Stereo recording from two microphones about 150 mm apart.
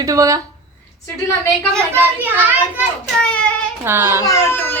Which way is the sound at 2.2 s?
10° right (ahead or behind).